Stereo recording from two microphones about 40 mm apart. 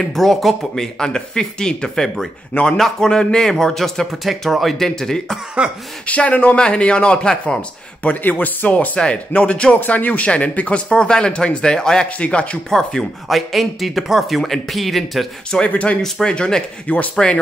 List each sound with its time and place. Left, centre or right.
0.1 s speech: centre
3.4 s speech: centre
5.6 s speech: right
6.0 s a man's voice: left
8.0 s a man's voice: left
9.8 s a man's voice: left
10.9 s speech: left
12.2 s speech: left
12.6 s speech: centre
13.3 s speech: centre
15.7 s a man's voice: left
16.3 s speech: centre
16.8 s a man's voice: left